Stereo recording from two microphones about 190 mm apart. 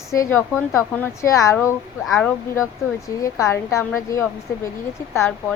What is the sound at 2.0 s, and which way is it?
Speech, centre (ahead or behind).